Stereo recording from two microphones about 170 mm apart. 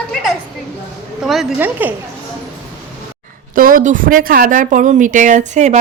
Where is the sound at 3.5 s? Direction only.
50° right (ahead or behind).